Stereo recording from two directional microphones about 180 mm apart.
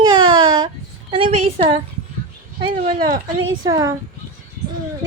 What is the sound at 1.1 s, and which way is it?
Speech, 30° right (ahead or behind).